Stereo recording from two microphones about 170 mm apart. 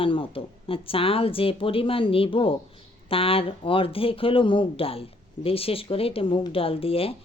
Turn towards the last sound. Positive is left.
turn(degrees=35)  # may be behind; listen again after turning